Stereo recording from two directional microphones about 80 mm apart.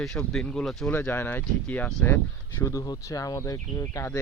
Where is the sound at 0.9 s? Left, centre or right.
Left.